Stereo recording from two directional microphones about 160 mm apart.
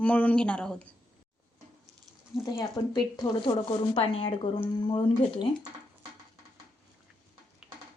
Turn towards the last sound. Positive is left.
turn(degrees=-5)  # may be behind; listen again after turning